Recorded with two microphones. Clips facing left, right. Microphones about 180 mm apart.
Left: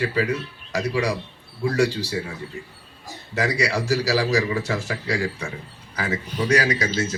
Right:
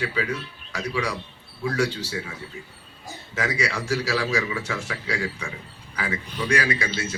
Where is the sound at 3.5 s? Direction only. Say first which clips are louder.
Left 3 dB; 35° left (ahead or behind).